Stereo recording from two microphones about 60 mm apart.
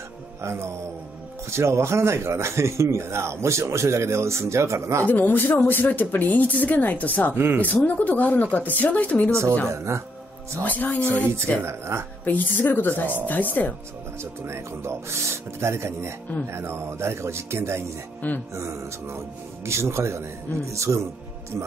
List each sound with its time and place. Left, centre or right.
0.4 s speech: right
5.0 s speech: left
7.3 s speech: right
7.6 s speech: left
9.7 s speech: right
10.6 s speech: left
11.6 s speech: right
12.3 s a woman's voice: left
14.2 s speech: right